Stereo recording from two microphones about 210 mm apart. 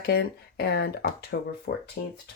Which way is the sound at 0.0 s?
55° left (ahead or behind).